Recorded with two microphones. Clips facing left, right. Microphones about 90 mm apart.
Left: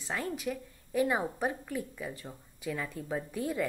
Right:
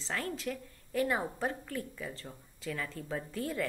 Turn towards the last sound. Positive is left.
turn(degrees=15)  # may be behind; listen again after turning